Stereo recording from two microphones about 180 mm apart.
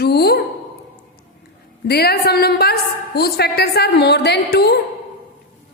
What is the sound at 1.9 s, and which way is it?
A woman's voice, 60° left (ahead or behind).